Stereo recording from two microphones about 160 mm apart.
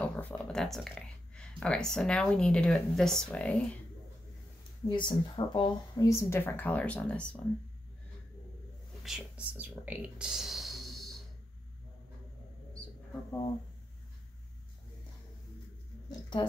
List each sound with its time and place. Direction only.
0.0 s speech: 10° left (ahead or behind)
4.8 s speech: 30° left (ahead or behind); by 7.2 s 5° left (ahead or behind)
9.0 s speech: 5° right (ahead or behind)
16.1 s speech: 30° left (ahead or behind)